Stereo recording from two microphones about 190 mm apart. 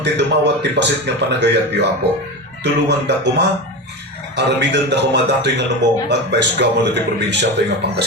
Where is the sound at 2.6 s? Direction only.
65° right (ahead or behind).